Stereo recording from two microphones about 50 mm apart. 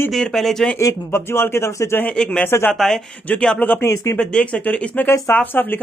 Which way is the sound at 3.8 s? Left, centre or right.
Left.